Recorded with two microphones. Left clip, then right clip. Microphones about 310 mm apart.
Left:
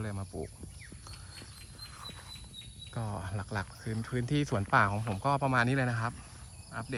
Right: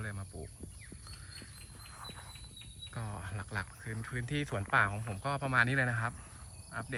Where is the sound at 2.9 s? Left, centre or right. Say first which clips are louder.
Left 6 dB; centre.